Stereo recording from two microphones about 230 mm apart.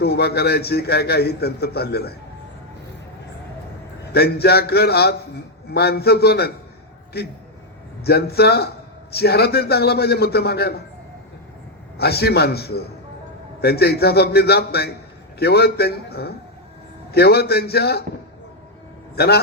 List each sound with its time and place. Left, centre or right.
0.0 s a man's voice: left
4.1 s a man's voice: left
11.9 s a man's voice: left
19.1 s a man's voice: left